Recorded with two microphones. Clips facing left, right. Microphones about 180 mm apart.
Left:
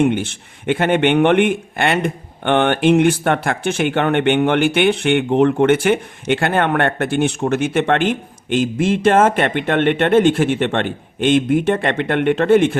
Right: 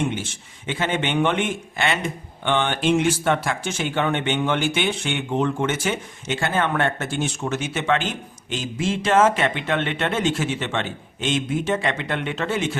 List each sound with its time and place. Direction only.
0.0 s speech: 60° left (ahead or behind)